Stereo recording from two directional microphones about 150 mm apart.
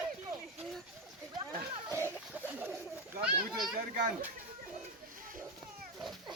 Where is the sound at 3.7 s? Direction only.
75° right (ahead or behind).